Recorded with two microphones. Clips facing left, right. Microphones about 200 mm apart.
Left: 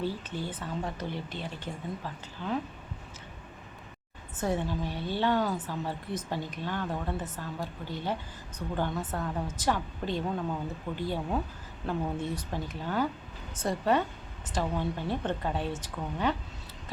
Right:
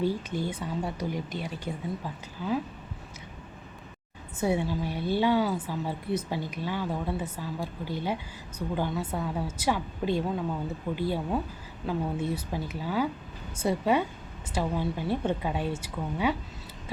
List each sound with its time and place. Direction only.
0.0 s a woman's voice: 15° right (ahead or behind)
4.4 s a woman's voice: 10° right (ahead or behind)